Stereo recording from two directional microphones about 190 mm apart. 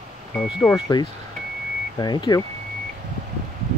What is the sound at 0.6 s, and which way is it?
Speech, 20° left (ahead or behind).